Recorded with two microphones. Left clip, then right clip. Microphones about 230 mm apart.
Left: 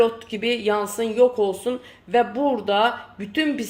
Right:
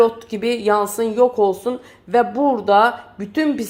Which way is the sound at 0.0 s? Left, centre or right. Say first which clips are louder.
Right 4 dB; right.